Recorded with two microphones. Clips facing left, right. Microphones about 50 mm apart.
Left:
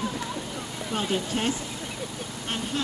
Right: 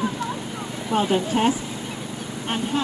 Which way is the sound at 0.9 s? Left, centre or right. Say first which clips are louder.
Right 7 dB; centre.